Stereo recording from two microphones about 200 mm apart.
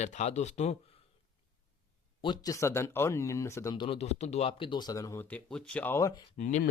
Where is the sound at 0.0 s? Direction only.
35° left (ahead or behind).